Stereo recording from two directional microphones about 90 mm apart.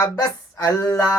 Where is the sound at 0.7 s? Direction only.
20° left (ahead or behind).